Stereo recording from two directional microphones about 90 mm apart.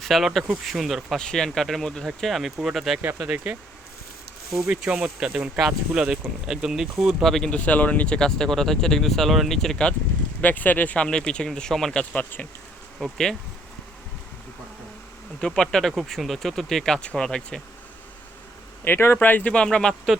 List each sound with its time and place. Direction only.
0.0 s speech: centre (ahead or behind)
3.0 s speech: 15° right (ahead or behind)
4.6 s speech: 10° right (ahead or behind); by 9.9 s 5° left (ahead or behind)
10.4 s speech: 20° left (ahead or behind)
12.1 s speech: 15° left (ahead or behind)
13.0 s speech: 5° left (ahead or behind)
15.4 s speech: 10° left (ahead or behind)
18.9 s speech: 25° left (ahead or behind); by 20.0 s 10° left (ahead or behind)